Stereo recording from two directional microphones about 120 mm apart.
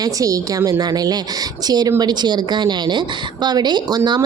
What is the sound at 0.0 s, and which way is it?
A woman's voice, 30° right (ahead or behind).